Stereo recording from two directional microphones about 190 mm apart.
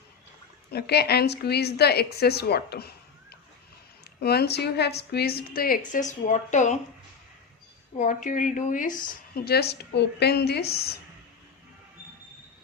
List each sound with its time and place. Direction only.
0.7 s a woman's voice: 55° left (ahead or behind)
4.2 s a woman's voice: 55° left (ahead or behind); by 6.7 s 40° left (ahead or behind)
7.9 s a woman's voice: 40° left (ahead or behind); by 10.9 s 55° left (ahead or behind)